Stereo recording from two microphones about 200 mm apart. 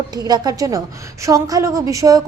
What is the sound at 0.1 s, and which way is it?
A woman's voice, 20° right (ahead or behind).